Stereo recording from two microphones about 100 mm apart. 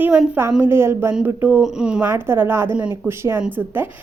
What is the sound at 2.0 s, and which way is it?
A woman's voice, 25° right (ahead or behind).